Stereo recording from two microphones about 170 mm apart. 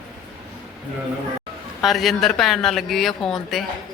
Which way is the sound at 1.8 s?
Centre (ahead or behind).